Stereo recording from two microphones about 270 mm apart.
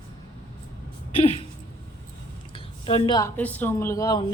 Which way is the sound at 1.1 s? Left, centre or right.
Left.